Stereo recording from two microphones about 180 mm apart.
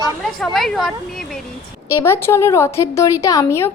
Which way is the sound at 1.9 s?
15° left (ahead or behind).